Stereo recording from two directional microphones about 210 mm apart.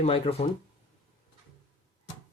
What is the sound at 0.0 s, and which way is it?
Speech, 30° left (ahead or behind).